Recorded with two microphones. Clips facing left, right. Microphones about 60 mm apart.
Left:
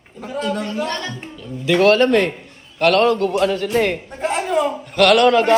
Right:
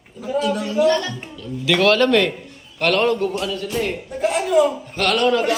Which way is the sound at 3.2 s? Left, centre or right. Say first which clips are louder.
Left 5 dB; left.